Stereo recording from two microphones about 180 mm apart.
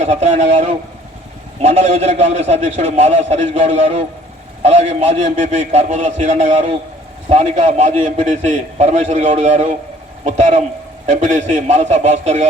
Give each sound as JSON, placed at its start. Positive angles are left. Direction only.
{"t": 0.0, "sound": "a man's voice", "side_deg": -40}